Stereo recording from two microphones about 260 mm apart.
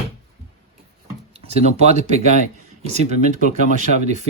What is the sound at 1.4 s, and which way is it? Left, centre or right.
Speech, right.